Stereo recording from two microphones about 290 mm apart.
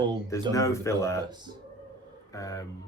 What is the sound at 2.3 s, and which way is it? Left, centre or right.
Speech, centre.